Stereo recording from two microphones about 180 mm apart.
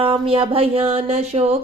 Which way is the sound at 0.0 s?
30° right (ahead or behind).